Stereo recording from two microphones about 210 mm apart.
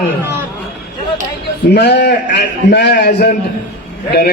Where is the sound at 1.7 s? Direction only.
55° left (ahead or behind).